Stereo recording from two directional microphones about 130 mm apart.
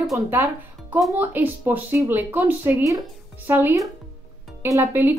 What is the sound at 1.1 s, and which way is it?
Speech, 15° right (ahead or behind).